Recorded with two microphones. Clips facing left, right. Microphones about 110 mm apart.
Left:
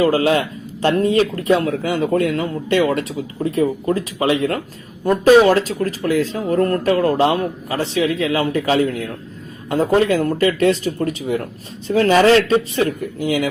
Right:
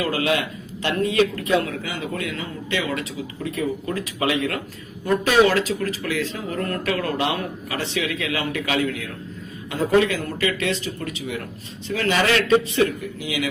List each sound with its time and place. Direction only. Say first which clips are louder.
0.0 s speech: left 7 dB; 35° left (ahead or behind)
3.4 s speech: left 8 dB; 35° left (ahead or behind)
13.1 s speech: left 10 dB; 45° left (ahead or behind)